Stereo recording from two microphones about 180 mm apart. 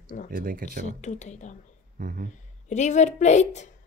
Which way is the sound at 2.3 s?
40° left (ahead or behind).